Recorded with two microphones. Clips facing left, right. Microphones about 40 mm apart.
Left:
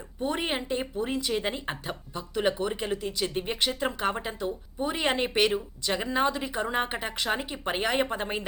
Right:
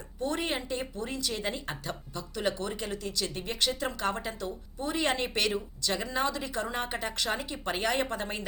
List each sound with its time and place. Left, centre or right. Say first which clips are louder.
0.2 s a woman's voice: left 2 dB; centre